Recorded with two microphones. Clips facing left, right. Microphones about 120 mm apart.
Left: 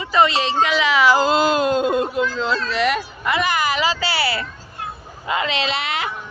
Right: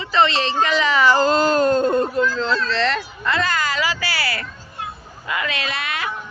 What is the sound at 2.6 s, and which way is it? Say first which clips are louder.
A woman's voice: left 1 dB; 10° left (ahead or behind).